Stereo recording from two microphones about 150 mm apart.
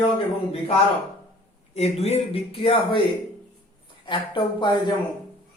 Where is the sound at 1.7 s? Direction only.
45° left (ahead or behind).